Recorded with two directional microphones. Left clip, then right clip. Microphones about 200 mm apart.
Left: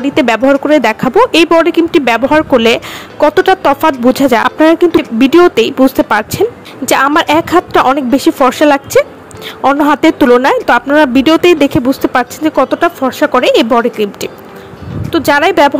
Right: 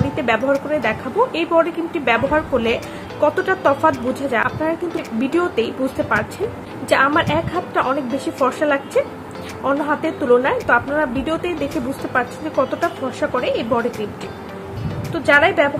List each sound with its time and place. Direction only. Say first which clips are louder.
0.1 s speech: left 10 dB; 50° left (ahead or behind)
15.1 s a woman's voice: left 6 dB; 55° left (ahead or behind)